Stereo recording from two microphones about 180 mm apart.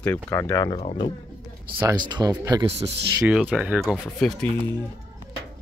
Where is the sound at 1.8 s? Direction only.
20° right (ahead or behind).